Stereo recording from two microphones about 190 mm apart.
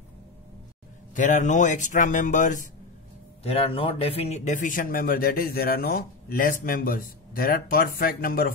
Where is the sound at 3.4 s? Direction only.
30° left (ahead or behind).